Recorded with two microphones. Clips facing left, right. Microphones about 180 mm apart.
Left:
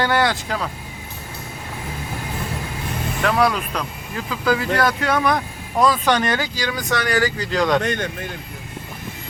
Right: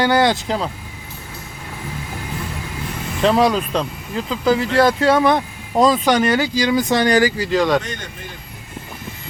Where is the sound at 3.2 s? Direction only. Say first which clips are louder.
Right 4 dB; 25° right (ahead or behind).